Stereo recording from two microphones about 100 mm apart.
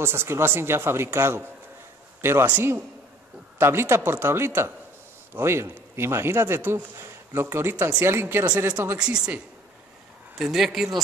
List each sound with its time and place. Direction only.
0.0 s a man's voice: 25° right (ahead or behind); by 11.0 s centre (ahead or behind)